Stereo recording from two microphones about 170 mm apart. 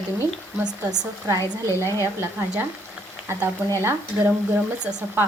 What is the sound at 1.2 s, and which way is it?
Stir, 20° right (ahead or behind).